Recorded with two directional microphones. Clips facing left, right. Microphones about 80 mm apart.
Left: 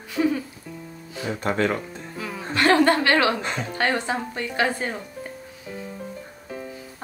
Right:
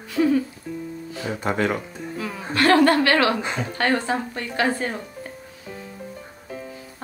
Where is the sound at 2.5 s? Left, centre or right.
Left.